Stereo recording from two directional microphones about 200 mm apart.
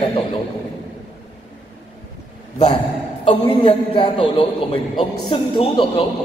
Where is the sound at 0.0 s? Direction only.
25° left (ahead or behind).